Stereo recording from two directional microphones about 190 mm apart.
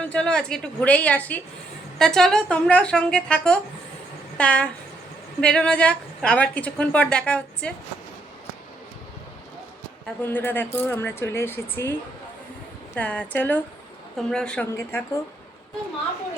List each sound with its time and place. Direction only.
0.0 s a woman's voice: 5° left (ahead or behind)
10.2 s a woman's voice: 10° left (ahead or behind)